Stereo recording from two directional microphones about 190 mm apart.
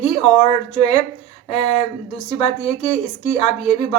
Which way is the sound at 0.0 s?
30° left (ahead or behind).